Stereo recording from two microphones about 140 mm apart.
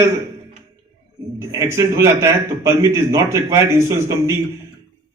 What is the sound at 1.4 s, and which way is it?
A man's voice, 20° right (ahead or behind).